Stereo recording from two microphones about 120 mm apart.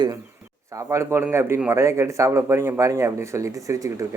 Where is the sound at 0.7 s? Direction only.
25° right (ahead or behind).